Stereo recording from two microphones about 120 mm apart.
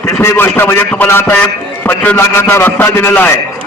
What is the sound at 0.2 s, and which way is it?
A man's voice, 20° left (ahead or behind).